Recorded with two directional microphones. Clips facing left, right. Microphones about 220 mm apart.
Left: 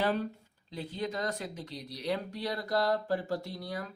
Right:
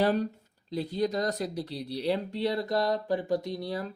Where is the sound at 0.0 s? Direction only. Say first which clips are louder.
Right 5 dB; 40° right (ahead or behind).